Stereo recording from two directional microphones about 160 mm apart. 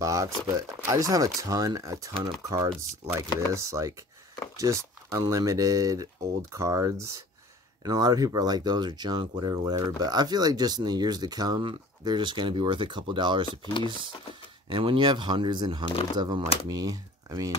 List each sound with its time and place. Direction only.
0.0 s speech: 20° right (ahead or behind)